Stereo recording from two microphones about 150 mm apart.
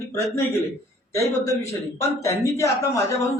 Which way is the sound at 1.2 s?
20° left (ahead or behind).